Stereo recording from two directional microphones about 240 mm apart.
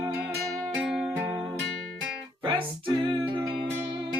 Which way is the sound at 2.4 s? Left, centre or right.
Right.